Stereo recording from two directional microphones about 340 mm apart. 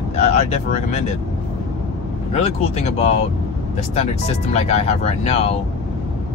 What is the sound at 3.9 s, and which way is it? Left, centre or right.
Speech, centre.